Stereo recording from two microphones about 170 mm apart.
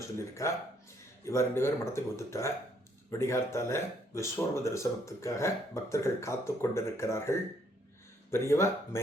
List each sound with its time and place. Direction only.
0.2 s speech: 15° left (ahead or behind)